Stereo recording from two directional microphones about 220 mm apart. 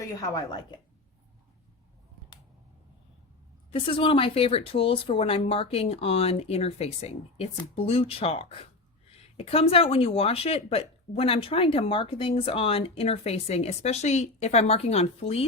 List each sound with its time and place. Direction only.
0.2 s a woman's voice: 15° left (ahead or behind)
3.7 s speech: 25° left (ahead or behind)